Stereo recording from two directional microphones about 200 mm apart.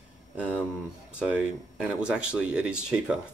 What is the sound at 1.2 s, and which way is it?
Speech, 5° right (ahead or behind).